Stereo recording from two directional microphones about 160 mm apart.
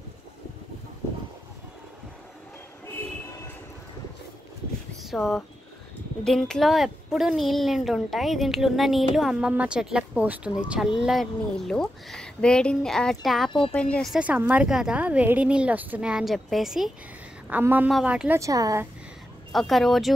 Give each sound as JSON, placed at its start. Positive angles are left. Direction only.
{"t": 5.0, "sound": "speech", "side_deg": 0}
{"t": 13.5, "sound": "speech", "side_deg": 35}
{"t": 13.7, "sound": "a woman's voice", "side_deg": 5}
{"t": 18.4, "sound": "speech", "side_deg": -20}
{"t": 19.5, "sound": "speech", "side_deg": 0}